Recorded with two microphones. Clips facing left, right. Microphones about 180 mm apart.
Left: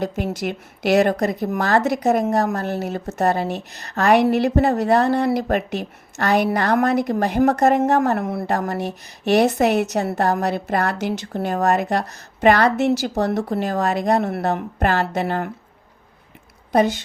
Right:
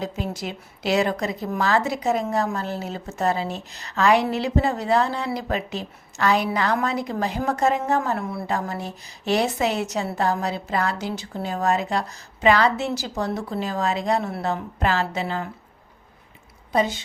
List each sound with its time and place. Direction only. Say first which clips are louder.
0.3 s a woman's voice: left 6 dB; 65° left (ahead or behind)
16.7 s speech: left 5 dB; 70° left (ahead or behind)